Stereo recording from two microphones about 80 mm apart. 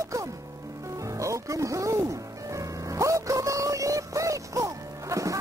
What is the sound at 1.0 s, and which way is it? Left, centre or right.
Music, right.